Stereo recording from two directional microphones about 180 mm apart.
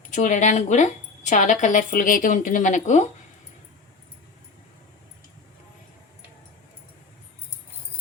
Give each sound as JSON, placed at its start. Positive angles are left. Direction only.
{"t": 0.1, "sound": "speech", "side_deg": 45}